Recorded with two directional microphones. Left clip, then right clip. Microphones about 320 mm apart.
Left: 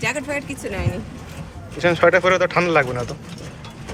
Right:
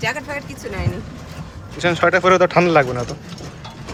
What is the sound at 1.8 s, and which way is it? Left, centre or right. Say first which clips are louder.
Speech: even; centre.